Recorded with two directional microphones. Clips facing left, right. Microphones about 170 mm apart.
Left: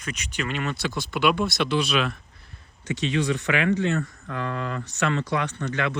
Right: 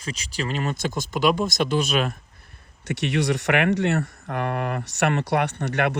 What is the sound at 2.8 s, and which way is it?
Speech, 70° right (ahead or behind).